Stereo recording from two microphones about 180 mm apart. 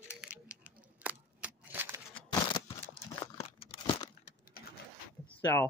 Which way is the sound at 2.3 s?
20° left (ahead or behind).